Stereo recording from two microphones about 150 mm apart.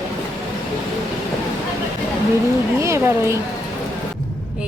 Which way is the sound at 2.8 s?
15° right (ahead or behind).